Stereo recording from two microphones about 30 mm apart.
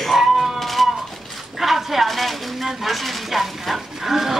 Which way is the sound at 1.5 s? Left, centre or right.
Centre.